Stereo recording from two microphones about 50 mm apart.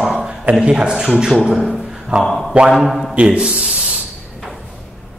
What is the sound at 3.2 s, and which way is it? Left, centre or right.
Speech, centre.